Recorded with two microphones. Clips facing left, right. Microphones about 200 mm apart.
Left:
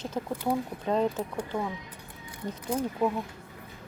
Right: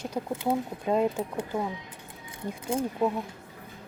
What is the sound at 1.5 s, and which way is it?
Speech, 25° right (ahead or behind).